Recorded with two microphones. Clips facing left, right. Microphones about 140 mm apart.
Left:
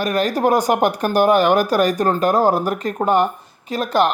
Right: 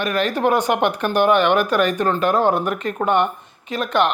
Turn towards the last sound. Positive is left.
turn(degrees=35)  # may be behind; listen again after turning